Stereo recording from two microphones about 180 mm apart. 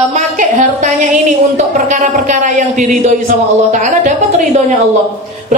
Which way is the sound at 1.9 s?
40° right (ahead or behind).